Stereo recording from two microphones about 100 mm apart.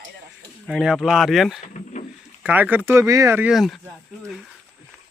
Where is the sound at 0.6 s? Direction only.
5° right (ahead or behind).